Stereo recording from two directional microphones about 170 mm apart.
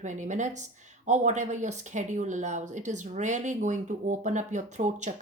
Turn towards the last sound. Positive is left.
turn(degrees=-45)  # may be behind; listen again after turning